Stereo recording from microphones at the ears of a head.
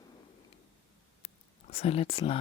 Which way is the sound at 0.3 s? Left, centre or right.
Left.